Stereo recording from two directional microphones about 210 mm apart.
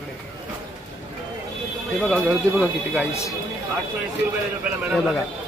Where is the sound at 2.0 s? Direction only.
Centre (ahead or behind).